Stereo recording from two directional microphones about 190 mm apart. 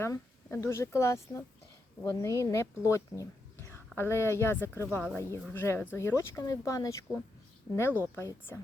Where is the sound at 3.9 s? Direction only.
15° left (ahead or behind).